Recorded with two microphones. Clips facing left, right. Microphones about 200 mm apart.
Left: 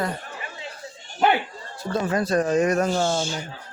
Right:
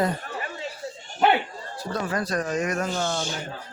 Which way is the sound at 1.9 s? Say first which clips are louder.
Left 5 dB; 25° left (ahead or behind).